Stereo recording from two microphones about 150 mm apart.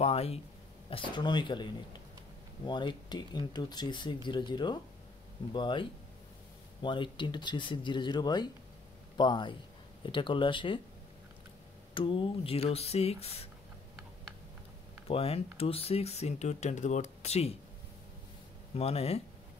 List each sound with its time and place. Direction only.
0.0 s speech: 40° left (ahead or behind)
11.9 s speech: 35° left (ahead or behind)
15.0 s speech: 40° left (ahead or behind)
18.8 s speech: 45° left (ahead or behind)